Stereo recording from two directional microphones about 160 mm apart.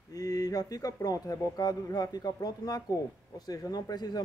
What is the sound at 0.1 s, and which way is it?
A man's voice, 20° left (ahead or behind).